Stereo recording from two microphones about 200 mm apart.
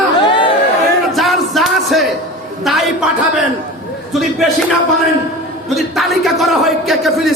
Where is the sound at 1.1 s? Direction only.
Centre (ahead or behind).